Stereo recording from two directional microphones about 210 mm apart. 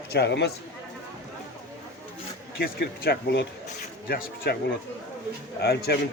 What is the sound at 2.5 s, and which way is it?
Speech, 45° left (ahead or behind).